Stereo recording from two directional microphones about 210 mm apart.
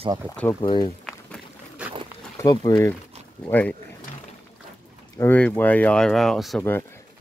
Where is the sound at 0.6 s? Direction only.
25° left (ahead or behind).